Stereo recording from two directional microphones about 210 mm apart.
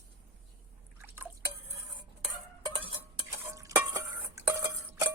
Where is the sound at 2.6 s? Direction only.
25° right (ahead or behind).